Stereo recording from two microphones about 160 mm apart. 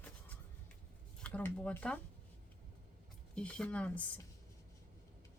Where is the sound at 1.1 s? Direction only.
5° left (ahead or behind).